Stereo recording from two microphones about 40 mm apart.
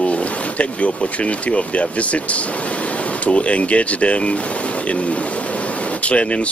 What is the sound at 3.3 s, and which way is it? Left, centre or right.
Speech, left.